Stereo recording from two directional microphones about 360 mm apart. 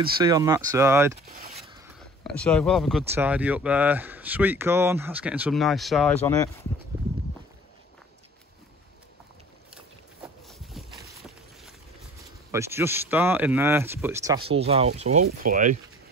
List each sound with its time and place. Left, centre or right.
0.2 s speech: centre
2.2 s speech: centre
10.2 s a sound: centre
12.4 s speech: centre; by 15.7 s right